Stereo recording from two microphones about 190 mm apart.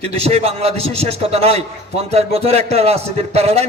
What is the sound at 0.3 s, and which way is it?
A man's voice, 30° right (ahead or behind).